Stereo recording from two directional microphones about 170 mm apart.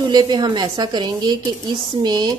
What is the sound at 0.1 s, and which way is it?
A woman's voice, 25° right (ahead or behind).